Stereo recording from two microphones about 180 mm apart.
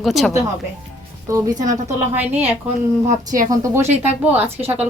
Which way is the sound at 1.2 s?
15° right (ahead or behind).